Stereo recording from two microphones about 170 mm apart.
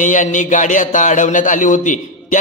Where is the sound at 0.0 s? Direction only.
50° left (ahead or behind).